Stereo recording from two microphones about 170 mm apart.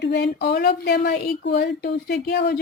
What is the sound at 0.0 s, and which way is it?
A woman's voice, 85° left.